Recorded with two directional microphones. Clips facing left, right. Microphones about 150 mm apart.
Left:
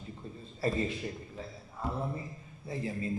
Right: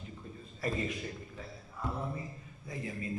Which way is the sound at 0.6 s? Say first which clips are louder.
Left 3 dB; 30° left (ahead or behind).